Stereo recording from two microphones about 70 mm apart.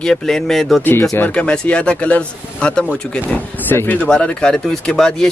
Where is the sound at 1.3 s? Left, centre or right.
Centre.